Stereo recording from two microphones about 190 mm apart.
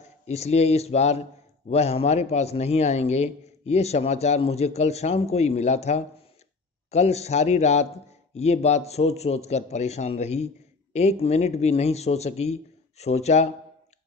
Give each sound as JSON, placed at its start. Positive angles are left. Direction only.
{"t": 0.0, "sound": "a man's voice", "side_deg": 35}